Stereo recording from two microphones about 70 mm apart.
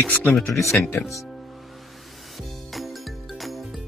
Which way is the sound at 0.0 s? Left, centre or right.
Left.